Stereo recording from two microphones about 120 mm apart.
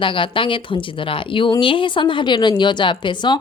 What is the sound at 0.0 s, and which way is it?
A woman's voice, 45° left (ahead or behind).